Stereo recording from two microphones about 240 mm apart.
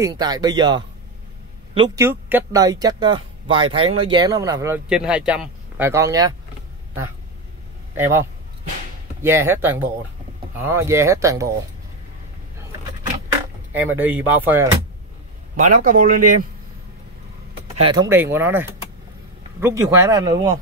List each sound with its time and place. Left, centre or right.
0.0 s speech: centre
2.0 s speech: centre
7.9 s a man's voice: centre
13.8 s speech: centre
15.5 s speech: right
17.7 s speech: centre